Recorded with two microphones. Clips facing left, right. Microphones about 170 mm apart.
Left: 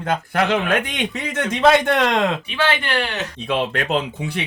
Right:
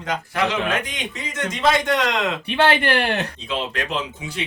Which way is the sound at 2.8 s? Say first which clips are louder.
Right 3 dB; 55° right (ahead or behind).